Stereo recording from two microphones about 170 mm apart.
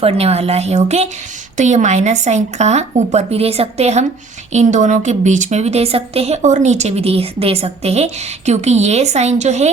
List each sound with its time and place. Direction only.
0.0 s a woman's voice: 35° right (ahead or behind)